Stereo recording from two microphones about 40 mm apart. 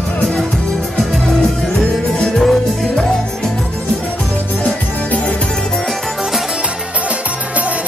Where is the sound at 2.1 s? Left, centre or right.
Centre.